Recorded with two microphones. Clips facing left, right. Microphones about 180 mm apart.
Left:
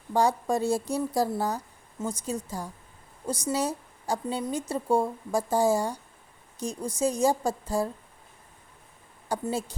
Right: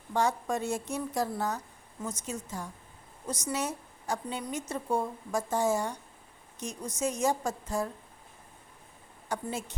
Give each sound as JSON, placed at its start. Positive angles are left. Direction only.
{"t": 0.1, "sound": "a woman's voice", "side_deg": 35}
{"t": 9.3, "sound": "a woman's voice", "side_deg": 35}